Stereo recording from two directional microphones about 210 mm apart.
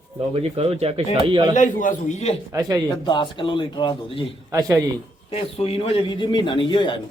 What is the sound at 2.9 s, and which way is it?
A man's voice, 20° left (ahead or behind).